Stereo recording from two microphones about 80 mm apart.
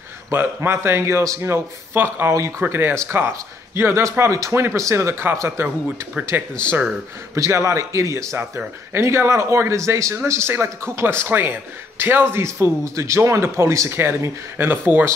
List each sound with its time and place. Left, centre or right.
0.3 s a man's voice: right
6.2 s speech: centre
7.3 s a man's voice: right